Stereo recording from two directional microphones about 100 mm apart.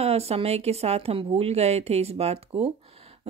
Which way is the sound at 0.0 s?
90° right.